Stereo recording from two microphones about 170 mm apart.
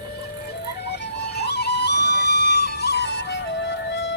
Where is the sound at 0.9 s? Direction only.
75° left (ahead or behind).